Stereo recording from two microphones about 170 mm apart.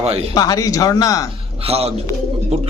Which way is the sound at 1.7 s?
35° right (ahead or behind).